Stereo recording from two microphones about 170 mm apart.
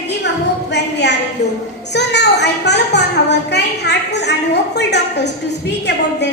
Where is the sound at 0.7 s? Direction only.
90° left.